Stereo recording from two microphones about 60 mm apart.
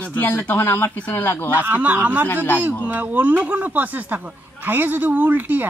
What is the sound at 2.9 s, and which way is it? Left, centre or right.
Speech, right.